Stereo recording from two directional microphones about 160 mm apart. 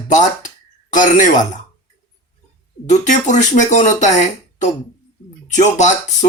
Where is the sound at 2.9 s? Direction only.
50° left (ahead or behind).